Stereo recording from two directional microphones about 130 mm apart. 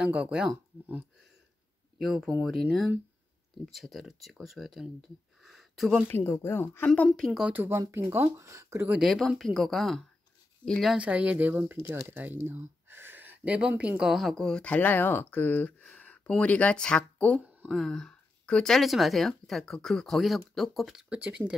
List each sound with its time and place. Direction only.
0.0 s speech: 10° right (ahead or behind)
2.0 s speech: centre (ahead or behind)
5.4 s a sound: centre (ahead or behind)
6.0 s speech: 20° left (ahead or behind)
6.9 s speech: 5° left (ahead or behind)
7.5 s speech: 15° right (ahead or behind)
8.9 s speech: centre (ahead or behind)
11.0 s speech: 10° right (ahead or behind)